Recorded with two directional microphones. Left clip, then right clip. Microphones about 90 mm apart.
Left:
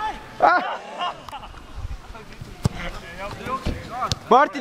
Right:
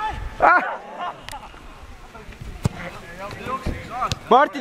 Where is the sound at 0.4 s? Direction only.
25° right (ahead or behind).